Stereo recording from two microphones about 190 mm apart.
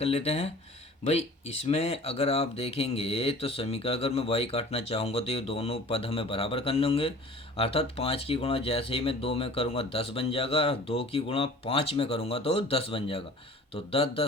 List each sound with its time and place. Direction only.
0.0 s speech: 30° left (ahead or behind)